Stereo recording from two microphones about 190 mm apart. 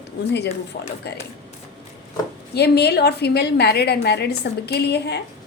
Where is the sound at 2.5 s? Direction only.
60° left (ahead or behind).